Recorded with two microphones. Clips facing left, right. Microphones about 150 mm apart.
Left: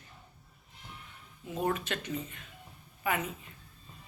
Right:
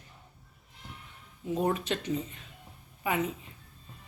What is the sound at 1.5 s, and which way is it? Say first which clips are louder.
Speech: right 3 dB; 30° right (ahead or behind).